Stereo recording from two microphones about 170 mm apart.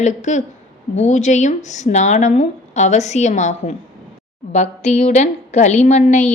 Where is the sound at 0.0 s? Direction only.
45° left (ahead or behind).